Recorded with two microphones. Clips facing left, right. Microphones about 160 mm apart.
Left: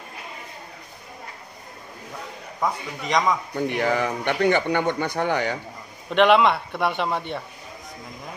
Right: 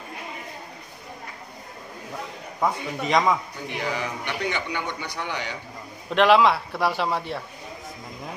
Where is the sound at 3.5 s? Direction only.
55° left (ahead or behind).